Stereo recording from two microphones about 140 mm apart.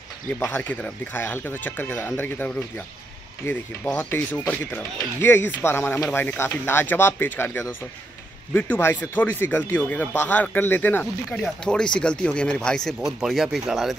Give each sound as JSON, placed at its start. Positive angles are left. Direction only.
{"t": 0.5, "sound": "speech", "side_deg": 10}